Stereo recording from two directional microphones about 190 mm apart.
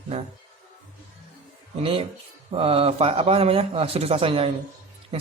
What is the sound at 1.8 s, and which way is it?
Speech, 30° right (ahead or behind).